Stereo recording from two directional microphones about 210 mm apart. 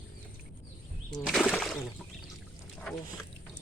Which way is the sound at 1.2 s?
Centre (ahead or behind).